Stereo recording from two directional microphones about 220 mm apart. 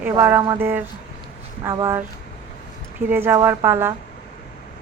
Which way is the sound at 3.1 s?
10° right (ahead or behind).